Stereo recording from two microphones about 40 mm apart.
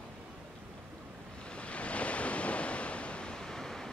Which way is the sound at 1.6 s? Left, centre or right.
Left.